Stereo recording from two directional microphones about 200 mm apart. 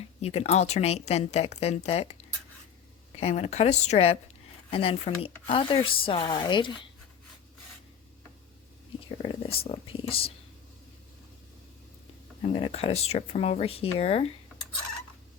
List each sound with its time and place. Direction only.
0.2 s speech: 30° left (ahead or behind)
3.2 s a woman's voice: 30° left (ahead or behind)
9.0 s a woman's voice: 25° left (ahead or behind)
12.4 s speech: 30° left (ahead or behind)